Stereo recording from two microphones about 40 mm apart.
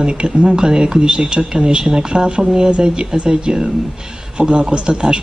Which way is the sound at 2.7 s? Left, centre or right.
Right.